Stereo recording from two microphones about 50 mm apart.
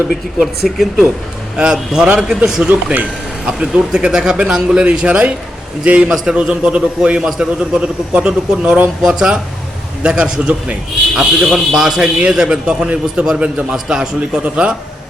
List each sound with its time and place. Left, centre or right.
0.3 s a man's voice: centre; by 6.1 s right
6.1 s a man's voice: centre
14.2 s speech: right